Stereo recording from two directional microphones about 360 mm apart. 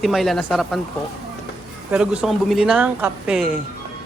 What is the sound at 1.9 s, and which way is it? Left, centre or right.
Speech, centre.